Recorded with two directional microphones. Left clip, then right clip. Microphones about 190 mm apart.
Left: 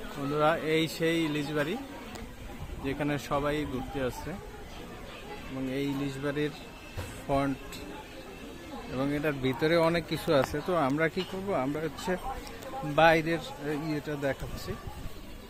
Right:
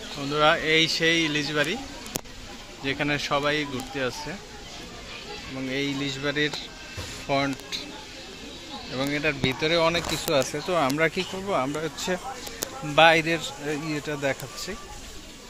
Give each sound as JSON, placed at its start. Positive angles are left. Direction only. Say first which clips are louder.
{"t": 0.3, "sound": "speech", "louder": "right 6 dB", "side_deg": 5}
{"t": 2.8, "sound": "speech", "louder": "right 6 dB", "side_deg": 0}
{"t": 5.7, "sound": "speech", "louder": "right 6 dB", "side_deg": 5}
{"t": 9.0, "sound": "speech", "louder": "right 5 dB", "side_deg": 5}
{"t": 9.6, "sound": "speech", "louder": "right 2 dB", "side_deg": 25}
{"t": 10.3, "sound": "speech", "louder": "right 3 dB", "side_deg": 10}